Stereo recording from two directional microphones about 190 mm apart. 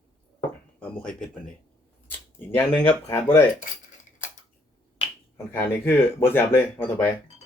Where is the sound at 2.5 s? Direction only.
10° left (ahead or behind).